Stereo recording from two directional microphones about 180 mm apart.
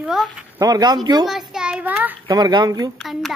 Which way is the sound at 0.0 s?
Centre (ahead or behind).